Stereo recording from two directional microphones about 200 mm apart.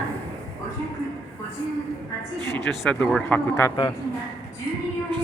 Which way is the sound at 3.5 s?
15° left (ahead or behind).